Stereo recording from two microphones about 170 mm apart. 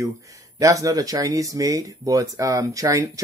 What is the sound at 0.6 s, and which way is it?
Speech, 20° right (ahead or behind).